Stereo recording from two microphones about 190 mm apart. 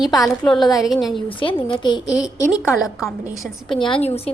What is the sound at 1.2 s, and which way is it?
A woman's voice, 25° left (ahead or behind).